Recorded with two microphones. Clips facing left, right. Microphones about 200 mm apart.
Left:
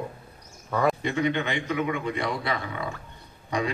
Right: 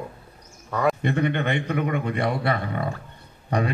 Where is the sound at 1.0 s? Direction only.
55° right (ahead or behind).